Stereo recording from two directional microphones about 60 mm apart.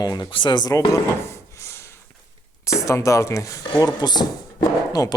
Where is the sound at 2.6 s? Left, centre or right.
Left.